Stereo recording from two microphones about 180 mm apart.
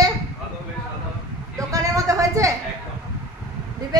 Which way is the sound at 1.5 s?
20° right (ahead or behind).